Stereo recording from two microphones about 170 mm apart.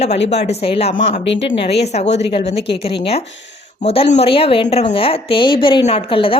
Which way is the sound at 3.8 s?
35° left (ahead or behind).